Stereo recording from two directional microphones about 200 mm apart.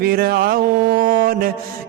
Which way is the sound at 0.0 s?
50° right (ahead or behind).